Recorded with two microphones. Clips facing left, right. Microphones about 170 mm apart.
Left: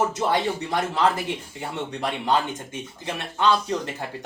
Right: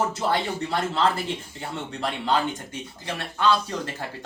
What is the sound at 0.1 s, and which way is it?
Speech, 15° left (ahead or behind).